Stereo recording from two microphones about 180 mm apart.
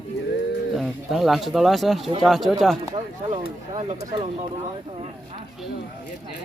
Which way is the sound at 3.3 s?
40° right (ahead or behind).